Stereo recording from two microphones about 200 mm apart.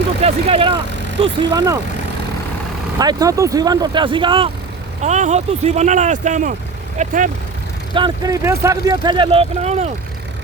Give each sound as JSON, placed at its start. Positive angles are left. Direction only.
{"t": 0.2, "sound": "speech", "side_deg": -30}
{"t": 3.0, "sound": "speech", "side_deg": -20}
{"t": 5.0, "sound": "speech", "side_deg": -35}
{"t": 7.9, "sound": "speech", "side_deg": -20}